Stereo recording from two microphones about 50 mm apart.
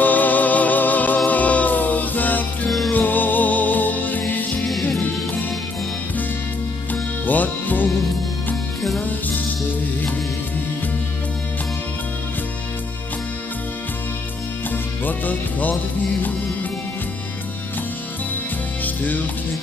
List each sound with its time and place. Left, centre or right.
0.0 s music: left
6.9 s music: left
14.7 s music: left